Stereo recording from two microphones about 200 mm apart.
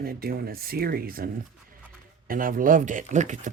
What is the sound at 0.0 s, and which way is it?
Speech, 50° right (ahead or behind).